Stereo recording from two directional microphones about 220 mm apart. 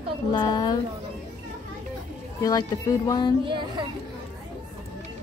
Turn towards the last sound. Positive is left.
turn(degrees=-20)  # may be behind; listen again after turning